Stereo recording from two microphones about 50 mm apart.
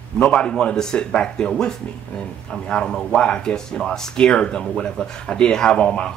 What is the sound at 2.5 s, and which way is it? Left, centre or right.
Speech, centre.